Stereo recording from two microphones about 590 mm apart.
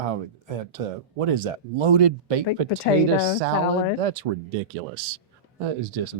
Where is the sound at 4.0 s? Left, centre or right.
Right.